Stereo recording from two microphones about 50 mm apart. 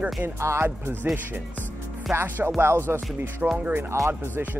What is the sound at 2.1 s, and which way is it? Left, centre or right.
Speech, right.